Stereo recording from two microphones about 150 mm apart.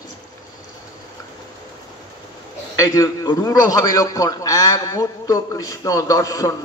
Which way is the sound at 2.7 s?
20° left (ahead or behind).